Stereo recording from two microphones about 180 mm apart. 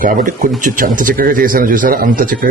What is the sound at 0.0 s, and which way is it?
Speech, 50° right (ahead or behind).